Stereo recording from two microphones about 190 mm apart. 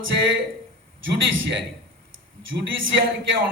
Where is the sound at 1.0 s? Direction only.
75° right (ahead or behind).